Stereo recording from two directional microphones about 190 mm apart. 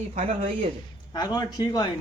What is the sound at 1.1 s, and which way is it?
Speech, 20° left (ahead or behind).